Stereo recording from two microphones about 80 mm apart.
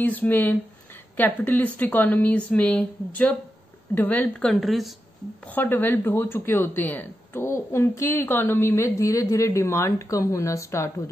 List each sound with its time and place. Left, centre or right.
0.0 s a woman's voice: left
4.4 s speech: centre
4.6 s speech: centre
5.5 s speech: left